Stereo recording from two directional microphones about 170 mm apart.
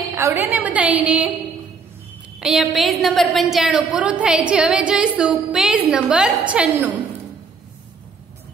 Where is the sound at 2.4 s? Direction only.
Centre (ahead or behind).